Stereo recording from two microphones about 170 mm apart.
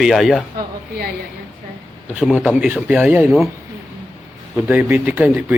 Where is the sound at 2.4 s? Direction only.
10° right (ahead or behind).